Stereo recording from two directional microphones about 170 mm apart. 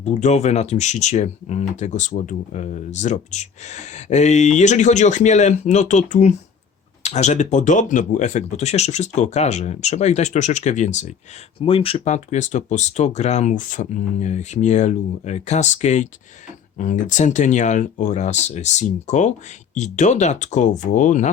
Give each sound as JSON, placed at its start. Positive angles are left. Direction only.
{"t": 0.0, "sound": "speech", "side_deg": 40}